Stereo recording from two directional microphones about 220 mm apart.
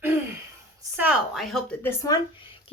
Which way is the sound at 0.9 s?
5° right (ahead or behind).